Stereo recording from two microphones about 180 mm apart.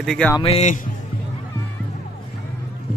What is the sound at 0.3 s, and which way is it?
Speech, 35° left (ahead or behind).